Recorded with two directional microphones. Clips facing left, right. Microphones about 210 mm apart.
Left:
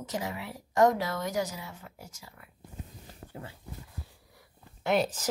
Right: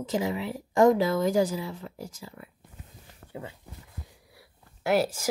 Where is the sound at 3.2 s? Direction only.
25° left (ahead or behind).